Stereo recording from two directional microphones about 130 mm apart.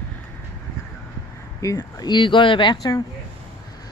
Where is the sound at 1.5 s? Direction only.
25° left (ahead or behind).